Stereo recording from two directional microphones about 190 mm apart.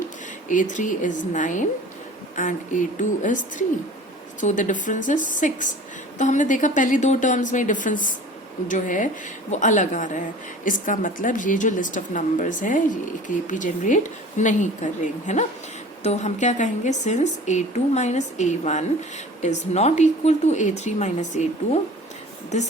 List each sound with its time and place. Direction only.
0.4 s a woman's voice: 40° left (ahead or behind)